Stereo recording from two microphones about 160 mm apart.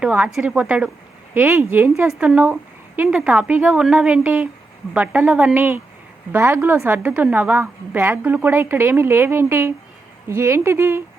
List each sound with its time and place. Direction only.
0.0 s a woman's voice: 5° right (ahead or behind)